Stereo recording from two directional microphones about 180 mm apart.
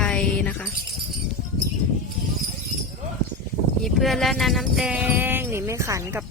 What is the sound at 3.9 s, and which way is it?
Speech, centre (ahead or behind).